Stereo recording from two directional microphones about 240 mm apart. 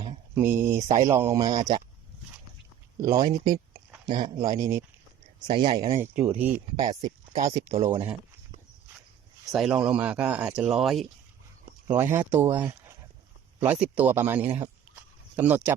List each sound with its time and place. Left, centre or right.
0.3 s speech: centre
3.0 s speech: centre
7.4 s speech: centre
9.6 s speech: centre